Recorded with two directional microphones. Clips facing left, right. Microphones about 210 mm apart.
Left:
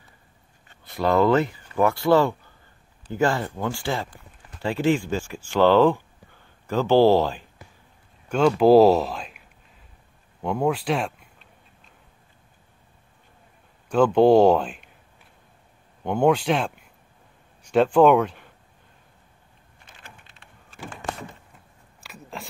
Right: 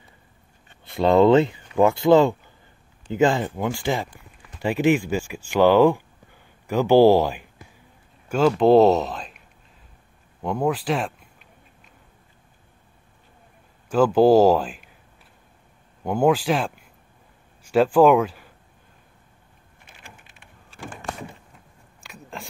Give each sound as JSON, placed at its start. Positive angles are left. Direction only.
{"t": 0.9, "sound": "speech", "side_deg": -25}
{"t": 8.3, "sound": "speech", "side_deg": 0}
{"t": 10.4, "sound": "speech", "side_deg": 0}
{"t": 13.8, "sound": "speech", "side_deg": -5}
{"t": 16.0, "sound": "speech", "side_deg": -5}
{"t": 22.0, "sound": "a sound", "side_deg": 0}